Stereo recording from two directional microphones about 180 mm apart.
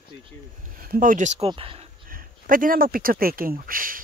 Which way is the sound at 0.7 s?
50° right (ahead or behind).